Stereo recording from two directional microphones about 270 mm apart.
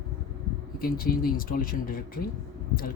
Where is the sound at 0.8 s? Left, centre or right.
Left.